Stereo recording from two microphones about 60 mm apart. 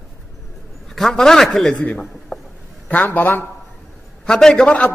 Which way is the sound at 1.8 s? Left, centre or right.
Centre.